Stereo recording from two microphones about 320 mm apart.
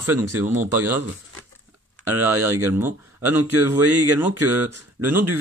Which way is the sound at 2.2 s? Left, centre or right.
Centre.